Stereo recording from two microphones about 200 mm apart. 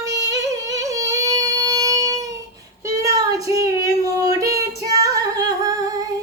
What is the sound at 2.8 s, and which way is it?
Child singing, 15° right (ahead or behind).